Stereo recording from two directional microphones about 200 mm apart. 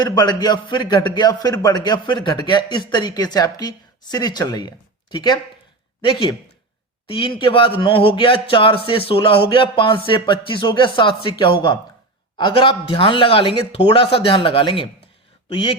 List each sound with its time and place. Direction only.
0.0 s a man's voice: 20° left (ahead or behind)